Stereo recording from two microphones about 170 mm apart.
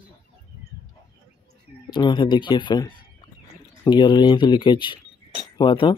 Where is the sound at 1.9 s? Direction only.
25° left (ahead or behind).